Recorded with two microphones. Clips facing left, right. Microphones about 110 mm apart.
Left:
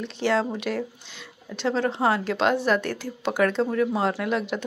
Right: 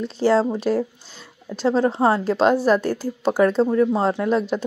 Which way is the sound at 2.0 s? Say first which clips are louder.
Right 4 dB; 20° right (ahead or behind).